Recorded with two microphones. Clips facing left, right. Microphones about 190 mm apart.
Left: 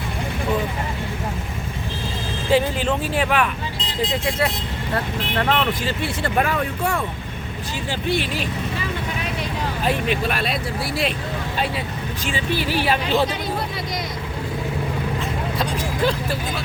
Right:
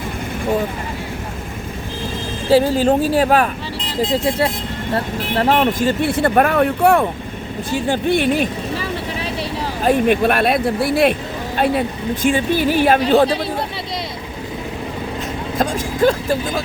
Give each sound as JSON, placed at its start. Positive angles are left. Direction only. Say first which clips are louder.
{"t": 2.5, "sound": "speech", "louder": "right 6 dB", "side_deg": -35}
{"t": 9.8, "sound": "speech", "louder": "right 9 dB", "side_deg": -50}
{"t": 15.5, "sound": "vehicle", "louder": "right 9 dB", "side_deg": -45}